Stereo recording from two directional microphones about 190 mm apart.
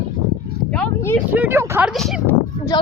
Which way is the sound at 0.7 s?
5° left (ahead or behind).